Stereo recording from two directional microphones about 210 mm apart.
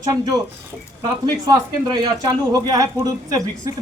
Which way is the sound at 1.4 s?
20° right (ahead or behind).